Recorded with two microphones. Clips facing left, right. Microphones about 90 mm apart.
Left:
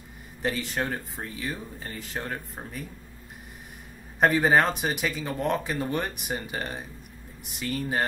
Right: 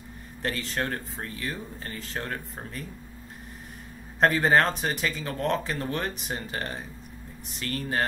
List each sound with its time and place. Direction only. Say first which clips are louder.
0.4 s speech: left 1 dB; 10° left (ahead or behind)
4.2 s speech: even; 5° left (ahead or behind)